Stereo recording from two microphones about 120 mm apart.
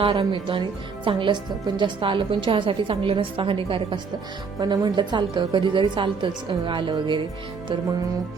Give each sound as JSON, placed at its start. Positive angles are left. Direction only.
{"t": 0.0, "sound": "a woman's voice", "side_deg": -45}
{"t": 4.6, "sound": "a woman's voice", "side_deg": -35}